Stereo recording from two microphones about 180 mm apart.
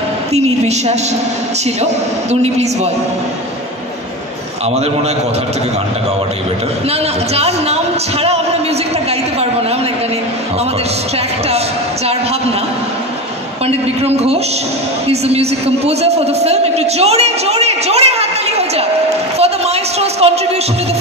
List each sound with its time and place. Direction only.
0.3 s a man's voice: 35° right (ahead or behind)
2.4 s a man's voice: 35° right (ahead or behind)
7.3 s a man's voice: 35° right (ahead or behind)
13.7 s a man's voice: 35° right (ahead or behind)
19.3 s a sound: 35° right (ahead or behind)